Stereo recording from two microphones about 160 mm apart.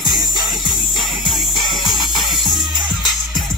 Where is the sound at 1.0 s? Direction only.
Centre (ahead or behind).